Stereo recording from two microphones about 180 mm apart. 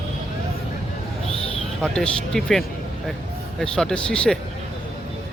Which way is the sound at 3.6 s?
5° left (ahead or behind).